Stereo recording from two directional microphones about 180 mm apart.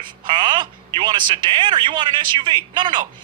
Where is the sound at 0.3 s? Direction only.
25° right (ahead or behind).